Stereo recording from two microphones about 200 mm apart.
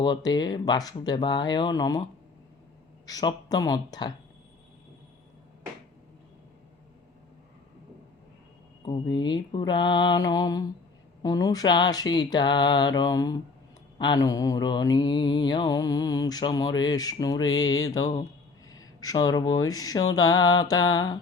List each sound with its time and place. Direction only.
0.0 s mantra: 20° left (ahead or behind)
3.1 s mantra: 20° left (ahead or behind)
8.8 s mantra: 20° left (ahead or behind)